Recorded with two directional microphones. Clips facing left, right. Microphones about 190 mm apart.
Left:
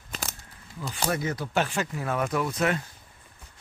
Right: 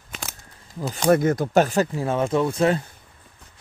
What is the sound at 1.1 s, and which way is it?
Speech, 50° right (ahead or behind).